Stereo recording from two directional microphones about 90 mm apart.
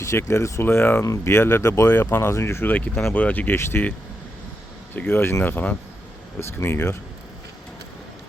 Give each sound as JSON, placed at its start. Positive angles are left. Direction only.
{"t": 0.0, "sound": "speech", "side_deg": 30}
{"t": 2.7, "sound": "speech", "side_deg": 15}
{"t": 4.9, "sound": "speech", "side_deg": 25}